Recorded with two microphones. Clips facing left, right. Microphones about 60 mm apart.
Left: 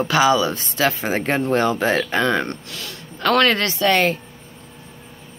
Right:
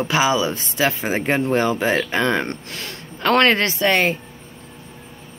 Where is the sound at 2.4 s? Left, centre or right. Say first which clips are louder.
Right 1 dB; right.